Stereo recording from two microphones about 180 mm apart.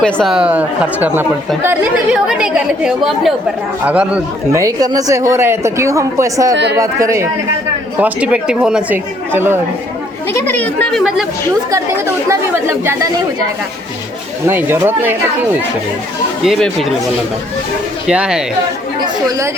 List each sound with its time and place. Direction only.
0.0 s a woman's voice: centre (ahead or behind)
4.5 s a woman's voice: 20° right (ahead or behind)
10.3 s speech: 10° left (ahead or behind)
11.7 s a woman's voice: 15° right (ahead or behind)
14.4 s a woman's voice: 10° right (ahead or behind)
16.4 s speech: centre (ahead or behind)
18.1 s speech: 5° right (ahead or behind)